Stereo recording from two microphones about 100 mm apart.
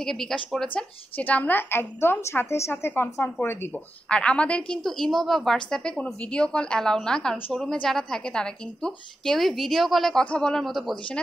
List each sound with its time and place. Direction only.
0.0 s a woman's voice: 5° left (ahead or behind)
1.1 s a woman's voice: 15° left (ahead or behind)
3.7 s a woman's voice: 10° left (ahead or behind)